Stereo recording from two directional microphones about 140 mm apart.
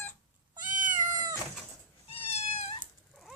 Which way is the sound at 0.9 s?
30° right (ahead or behind).